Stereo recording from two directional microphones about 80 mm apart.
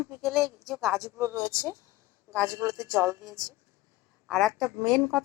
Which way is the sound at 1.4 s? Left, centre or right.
Centre.